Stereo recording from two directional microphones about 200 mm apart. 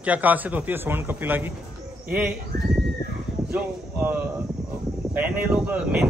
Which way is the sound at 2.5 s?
55° right (ahead or behind).